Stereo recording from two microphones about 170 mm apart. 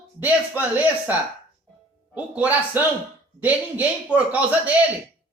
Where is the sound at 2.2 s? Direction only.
10° right (ahead or behind).